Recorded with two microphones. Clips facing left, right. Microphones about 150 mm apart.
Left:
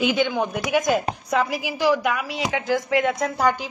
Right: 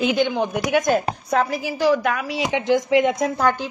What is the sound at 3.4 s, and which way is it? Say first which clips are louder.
Speech: left 1 dB; 10° left (ahead or behind).